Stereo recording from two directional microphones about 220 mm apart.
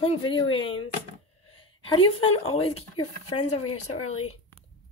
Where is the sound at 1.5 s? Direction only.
25° left (ahead or behind).